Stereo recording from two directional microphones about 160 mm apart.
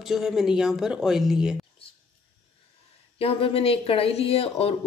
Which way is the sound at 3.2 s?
35° left (ahead or behind).